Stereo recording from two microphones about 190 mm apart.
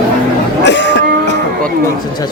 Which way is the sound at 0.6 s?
65° left (ahead or behind).